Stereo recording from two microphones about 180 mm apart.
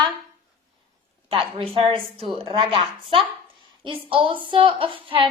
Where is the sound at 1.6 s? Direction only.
30° right (ahead or behind).